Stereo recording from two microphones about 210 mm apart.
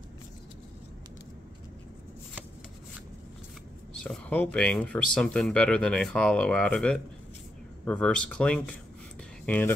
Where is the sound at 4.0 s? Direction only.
5° left (ahead or behind).